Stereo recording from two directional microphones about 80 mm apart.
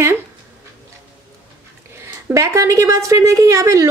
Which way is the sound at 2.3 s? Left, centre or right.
Right.